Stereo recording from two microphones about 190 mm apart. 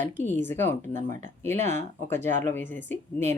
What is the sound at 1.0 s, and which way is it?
Speech, 40° right (ahead or behind).